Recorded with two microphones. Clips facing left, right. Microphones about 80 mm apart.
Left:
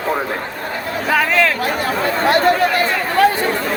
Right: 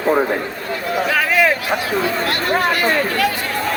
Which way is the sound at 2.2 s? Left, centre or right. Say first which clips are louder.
Left 4 dB; left.